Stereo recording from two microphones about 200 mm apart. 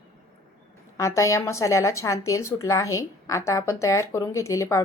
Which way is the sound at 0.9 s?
15° left (ahead or behind).